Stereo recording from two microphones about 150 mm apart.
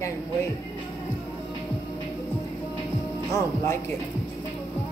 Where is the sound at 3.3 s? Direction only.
20° left (ahead or behind).